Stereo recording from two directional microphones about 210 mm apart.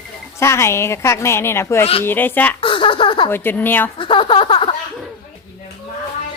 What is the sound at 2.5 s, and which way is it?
Speech, 25° left (ahead or behind).